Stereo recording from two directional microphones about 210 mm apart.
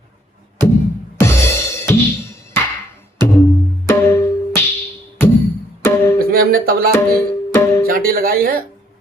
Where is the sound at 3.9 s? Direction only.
15° left (ahead or behind).